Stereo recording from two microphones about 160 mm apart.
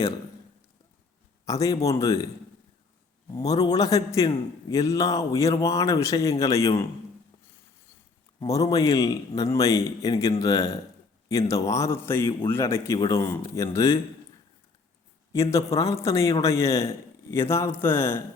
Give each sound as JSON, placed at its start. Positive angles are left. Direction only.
{"t": 1.5, "sound": "speech", "side_deg": 20}
{"t": 3.3, "sound": "speech", "side_deg": 20}
{"t": 8.4, "sound": "a man's voice", "side_deg": 20}
{"t": 15.3, "sound": "a man's voice", "side_deg": 20}